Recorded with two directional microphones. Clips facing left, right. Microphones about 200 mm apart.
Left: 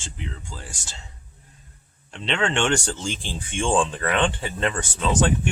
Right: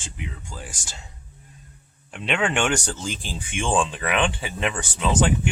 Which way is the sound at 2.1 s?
10° right (ahead or behind).